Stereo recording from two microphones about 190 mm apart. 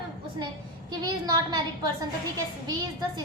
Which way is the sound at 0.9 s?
20° right (ahead or behind).